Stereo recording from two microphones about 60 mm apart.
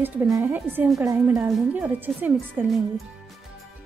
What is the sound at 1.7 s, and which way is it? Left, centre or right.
Speech, right.